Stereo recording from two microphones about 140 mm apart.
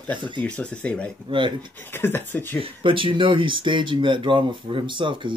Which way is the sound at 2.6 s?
40° right (ahead or behind).